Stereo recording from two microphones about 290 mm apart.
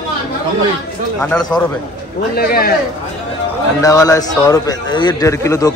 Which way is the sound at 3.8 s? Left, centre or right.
Centre.